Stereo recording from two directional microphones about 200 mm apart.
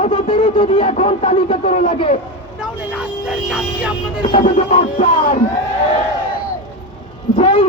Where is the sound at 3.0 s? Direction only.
Centre (ahead or behind).